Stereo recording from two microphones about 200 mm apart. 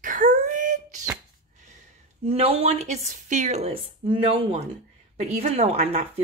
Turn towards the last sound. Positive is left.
turn(degrees=-35)  # may be behind; listen again after turning